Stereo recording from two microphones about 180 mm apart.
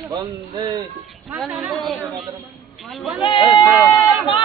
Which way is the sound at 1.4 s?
Centre (ahead or behind).